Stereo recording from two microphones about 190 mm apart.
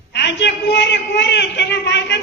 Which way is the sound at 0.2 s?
65° left (ahead or behind).